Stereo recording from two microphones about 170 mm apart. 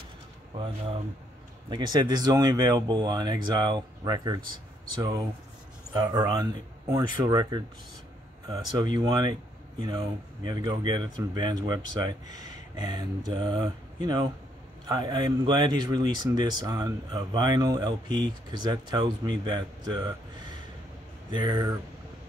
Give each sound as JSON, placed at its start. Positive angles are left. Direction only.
{"t": 1.7, "sound": "speech", "side_deg": -25}
{"t": 21.3, "sound": "speech", "side_deg": -25}